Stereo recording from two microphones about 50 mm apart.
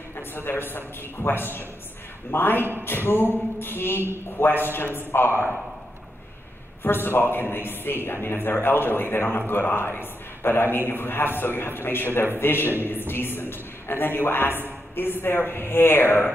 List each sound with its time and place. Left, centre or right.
0.1 s a man's voice: left
6.8 s a man's voice: left